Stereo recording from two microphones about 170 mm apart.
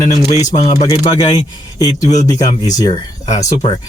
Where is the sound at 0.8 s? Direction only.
20° left (ahead or behind).